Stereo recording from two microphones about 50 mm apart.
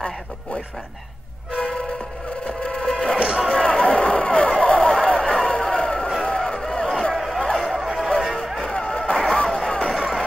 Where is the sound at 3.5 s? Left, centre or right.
Centre.